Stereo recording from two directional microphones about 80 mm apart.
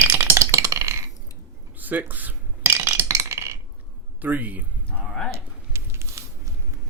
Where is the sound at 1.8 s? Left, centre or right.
Right.